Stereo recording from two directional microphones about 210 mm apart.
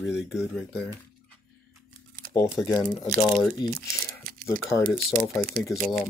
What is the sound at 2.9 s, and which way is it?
Speech, 5° left (ahead or behind).